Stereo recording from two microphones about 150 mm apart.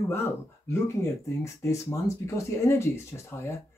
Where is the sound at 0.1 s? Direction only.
15° left (ahead or behind).